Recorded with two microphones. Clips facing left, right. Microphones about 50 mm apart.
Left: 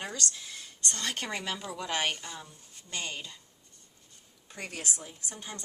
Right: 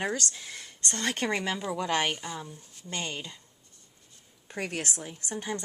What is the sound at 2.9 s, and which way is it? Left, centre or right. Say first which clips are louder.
Speech: right 3 dB; right.